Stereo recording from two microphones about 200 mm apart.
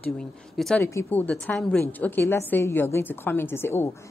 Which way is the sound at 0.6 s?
Centre (ahead or behind).